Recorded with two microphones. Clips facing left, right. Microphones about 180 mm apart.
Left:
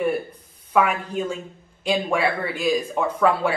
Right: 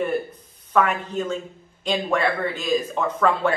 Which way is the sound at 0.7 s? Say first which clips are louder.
Even; 10° left (ahead or behind).